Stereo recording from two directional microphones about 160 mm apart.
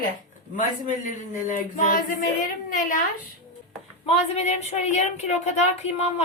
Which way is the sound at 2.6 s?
55° left (ahead or behind).